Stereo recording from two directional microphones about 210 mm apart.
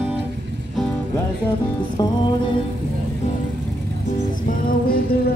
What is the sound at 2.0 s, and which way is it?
Music, 20° left (ahead or behind).